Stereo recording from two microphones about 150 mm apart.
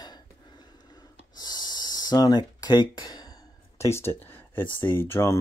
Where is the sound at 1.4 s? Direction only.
25° left (ahead or behind).